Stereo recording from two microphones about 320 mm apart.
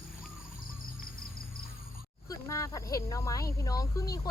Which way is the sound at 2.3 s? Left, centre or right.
Centre.